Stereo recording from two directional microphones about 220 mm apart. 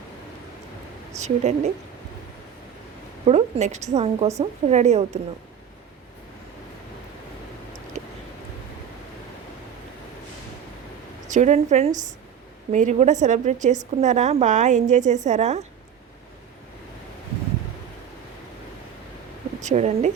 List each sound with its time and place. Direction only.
1.2 s a woman's voice: 30° right (ahead or behind)
3.2 s a woman's voice: 30° right (ahead or behind)
11.3 s a woman's voice: 35° right (ahead or behind)
19.6 s a woman's voice: 30° right (ahead or behind)